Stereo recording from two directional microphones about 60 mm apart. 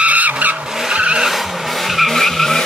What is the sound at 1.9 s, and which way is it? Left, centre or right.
Vehicle, centre.